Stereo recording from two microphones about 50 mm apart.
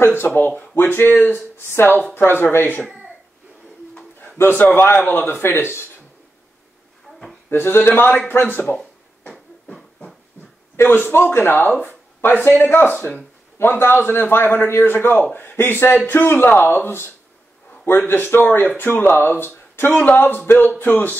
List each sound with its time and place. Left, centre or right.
0.2 s a man's voice: left
4.2 s a sound: left
4.7 s a man's voice: left
5.0 s a man's voice: left
7.5 s a man's voice: left
9.7 s a sound: centre
10.8 s a man's voice: left
12.9 s speech: left
13.6 s a man's voice: left